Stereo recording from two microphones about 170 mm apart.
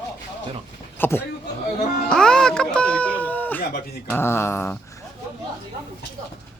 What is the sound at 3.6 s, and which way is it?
Speech, 60° left (ahead or behind).